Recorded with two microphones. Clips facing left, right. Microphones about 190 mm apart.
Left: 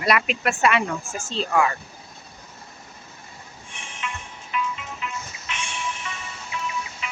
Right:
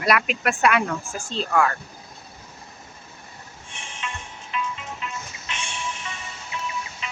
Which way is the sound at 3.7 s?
30° right (ahead or behind).